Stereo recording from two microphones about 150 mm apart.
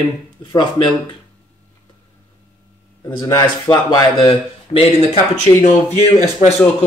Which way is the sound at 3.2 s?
30° left (ahead or behind).